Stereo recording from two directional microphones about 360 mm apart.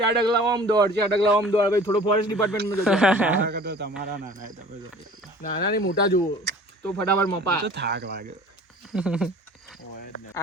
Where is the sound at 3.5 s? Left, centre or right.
Right.